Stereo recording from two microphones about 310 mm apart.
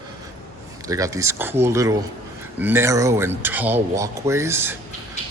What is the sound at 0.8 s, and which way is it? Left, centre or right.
A man's voice, centre.